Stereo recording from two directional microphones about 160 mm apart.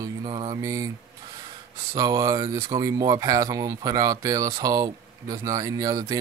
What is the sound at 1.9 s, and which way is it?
Speech, 20° right (ahead or behind).